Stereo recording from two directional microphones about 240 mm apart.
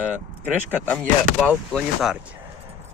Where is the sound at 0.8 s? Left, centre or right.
Centre.